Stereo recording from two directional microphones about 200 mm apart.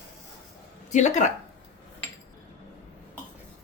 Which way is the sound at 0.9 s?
35° left (ahead or behind).